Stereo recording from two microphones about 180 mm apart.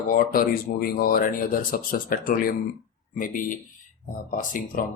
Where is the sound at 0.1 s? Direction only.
55° left (ahead or behind).